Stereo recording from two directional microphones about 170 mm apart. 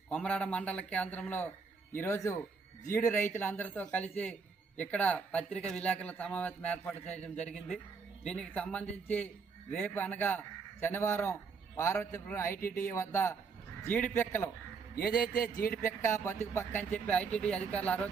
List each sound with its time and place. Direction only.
0.1 s a man's voice: 5° left (ahead or behind)
8.2 s a man's voice: 5° left (ahead or behind)
14.9 s a man's voice: 60° left (ahead or behind)
16.0 s a man's voice: 15° left (ahead or behind)